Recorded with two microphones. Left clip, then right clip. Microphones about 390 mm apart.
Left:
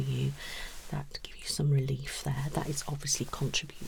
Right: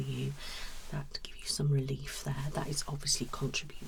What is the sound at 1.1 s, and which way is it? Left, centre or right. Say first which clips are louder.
Speech: even; left.